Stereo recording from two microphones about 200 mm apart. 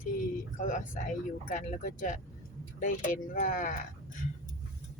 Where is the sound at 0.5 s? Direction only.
40° left (ahead or behind).